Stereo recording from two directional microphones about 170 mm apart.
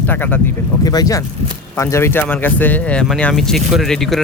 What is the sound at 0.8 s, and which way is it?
Speech, 20° left (ahead or behind).